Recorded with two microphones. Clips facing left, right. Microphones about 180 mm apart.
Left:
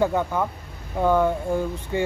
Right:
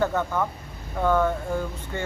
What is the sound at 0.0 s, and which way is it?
Speech, 10° left (ahead or behind).